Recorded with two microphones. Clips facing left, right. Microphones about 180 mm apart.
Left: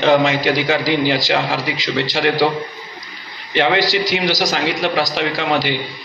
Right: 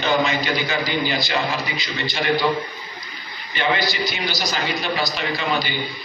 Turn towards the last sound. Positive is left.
turn(degrees=85)